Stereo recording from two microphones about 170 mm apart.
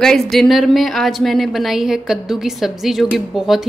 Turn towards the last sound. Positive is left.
turn(degrees=0)  # may be behind; listen again after turning